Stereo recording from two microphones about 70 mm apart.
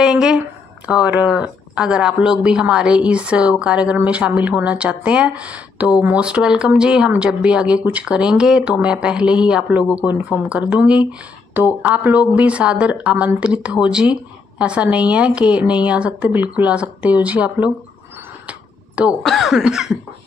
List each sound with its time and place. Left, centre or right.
0.0 s a woman's voice: centre
18.5 s a sound: centre
19.2 s a woman's voice: centre